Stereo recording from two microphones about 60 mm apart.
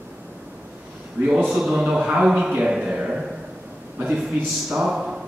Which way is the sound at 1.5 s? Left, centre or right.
Centre.